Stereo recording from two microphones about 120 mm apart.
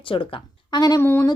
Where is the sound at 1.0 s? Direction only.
20° left (ahead or behind).